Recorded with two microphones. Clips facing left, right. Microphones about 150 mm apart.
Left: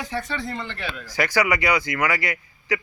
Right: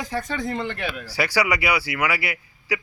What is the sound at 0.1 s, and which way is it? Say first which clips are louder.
Speech: right 2 dB; 40° right (ahead or behind).